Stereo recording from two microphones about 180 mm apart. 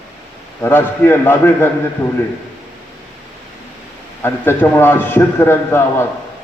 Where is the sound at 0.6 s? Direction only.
10° left (ahead or behind).